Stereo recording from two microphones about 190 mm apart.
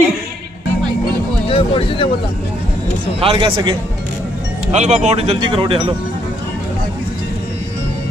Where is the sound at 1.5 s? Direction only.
30° left (ahead or behind).